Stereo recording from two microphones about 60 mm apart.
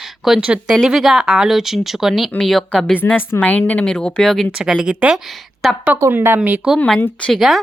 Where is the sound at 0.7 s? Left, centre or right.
Centre.